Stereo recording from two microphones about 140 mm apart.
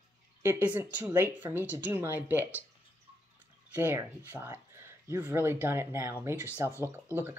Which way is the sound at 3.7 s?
15° right (ahead or behind).